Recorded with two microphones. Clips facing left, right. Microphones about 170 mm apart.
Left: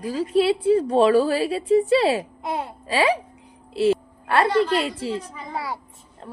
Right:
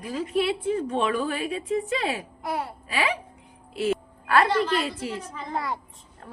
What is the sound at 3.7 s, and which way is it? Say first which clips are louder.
Music: left 6 dB; 30° left (ahead or behind).